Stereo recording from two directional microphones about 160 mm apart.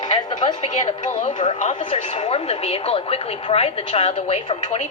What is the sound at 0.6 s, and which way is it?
A woman's voice, 45° left (ahead or behind).